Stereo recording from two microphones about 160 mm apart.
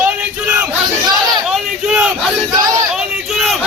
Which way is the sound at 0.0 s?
10° right (ahead or behind).